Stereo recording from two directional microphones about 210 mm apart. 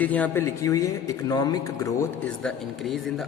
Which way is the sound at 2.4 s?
Centre (ahead or behind).